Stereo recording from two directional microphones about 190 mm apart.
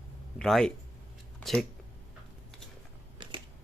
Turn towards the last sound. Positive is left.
turn(degrees=-25)  # may be behind; listen again after turning